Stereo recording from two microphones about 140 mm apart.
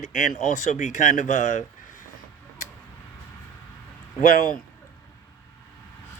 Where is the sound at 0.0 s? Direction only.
65° left (ahead or behind).